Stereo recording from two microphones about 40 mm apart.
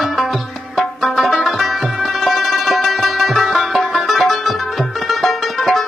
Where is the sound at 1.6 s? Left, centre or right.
Centre.